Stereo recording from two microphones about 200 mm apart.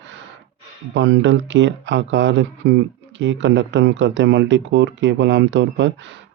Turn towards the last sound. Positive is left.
turn(degrees=-60)  # may be behind; listen again after turning